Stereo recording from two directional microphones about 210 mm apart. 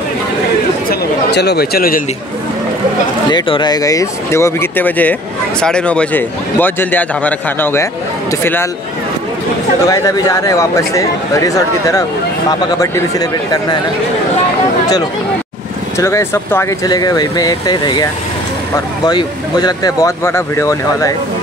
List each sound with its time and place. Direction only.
0.8 s speech: 50° left (ahead or behind)
3.3 s a man's voice: 20° left (ahead or behind)
9.8 s a man's voice: 15° left (ahead or behind)
16.0 s speech: 15° left (ahead or behind)
19.0 s a man's voice: 20° left (ahead or behind)